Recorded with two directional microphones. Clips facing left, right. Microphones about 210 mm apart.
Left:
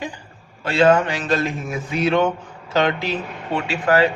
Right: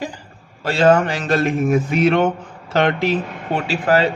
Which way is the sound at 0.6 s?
40° right (ahead or behind).